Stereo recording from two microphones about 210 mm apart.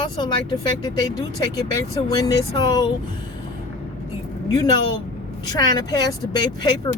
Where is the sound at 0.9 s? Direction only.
15° left (ahead or behind).